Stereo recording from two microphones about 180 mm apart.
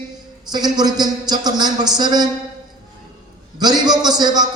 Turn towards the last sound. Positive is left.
turn(degrees=-25)  # may be behind; listen again after turning